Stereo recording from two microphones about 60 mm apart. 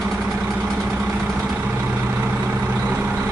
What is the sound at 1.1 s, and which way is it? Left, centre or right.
Vehicle, right.